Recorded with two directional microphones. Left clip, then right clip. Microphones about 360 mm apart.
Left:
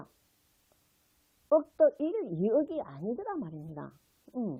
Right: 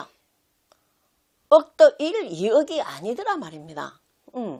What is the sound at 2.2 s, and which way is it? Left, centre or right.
Speech, right.